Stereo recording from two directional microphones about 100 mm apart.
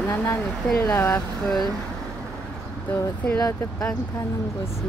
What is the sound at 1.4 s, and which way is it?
Speech, 5° left (ahead or behind).